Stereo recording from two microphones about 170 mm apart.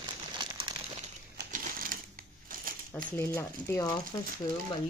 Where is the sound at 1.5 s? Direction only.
55° right (ahead or behind).